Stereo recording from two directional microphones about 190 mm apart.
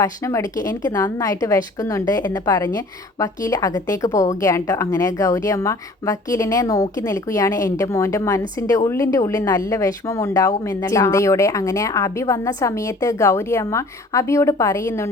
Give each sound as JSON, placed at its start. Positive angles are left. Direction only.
{"t": 0.0, "sound": "a woman's voice", "side_deg": 15}